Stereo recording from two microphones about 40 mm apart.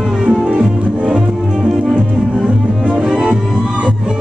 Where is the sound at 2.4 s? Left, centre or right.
Right.